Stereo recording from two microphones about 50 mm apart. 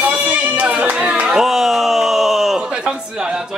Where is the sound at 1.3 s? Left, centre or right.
Centre.